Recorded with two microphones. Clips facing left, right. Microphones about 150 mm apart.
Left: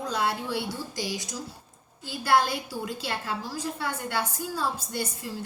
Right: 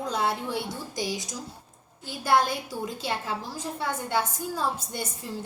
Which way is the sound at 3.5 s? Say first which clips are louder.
Even; 20° right (ahead or behind).